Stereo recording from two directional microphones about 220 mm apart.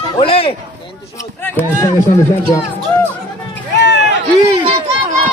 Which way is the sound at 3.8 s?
50° left (ahead or behind).